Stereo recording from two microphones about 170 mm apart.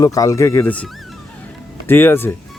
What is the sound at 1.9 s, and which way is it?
Speech, 10° left (ahead or behind).